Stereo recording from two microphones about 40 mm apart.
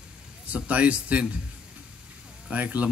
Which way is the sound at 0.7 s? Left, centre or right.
Right.